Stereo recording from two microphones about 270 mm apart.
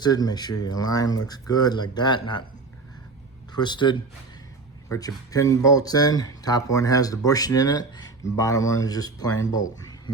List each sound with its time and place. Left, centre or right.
0.0 s speech: centre
3.5 s speech: centre